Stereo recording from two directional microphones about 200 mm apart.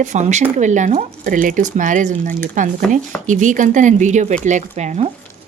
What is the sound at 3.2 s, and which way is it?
Speech, 40° right (ahead or behind).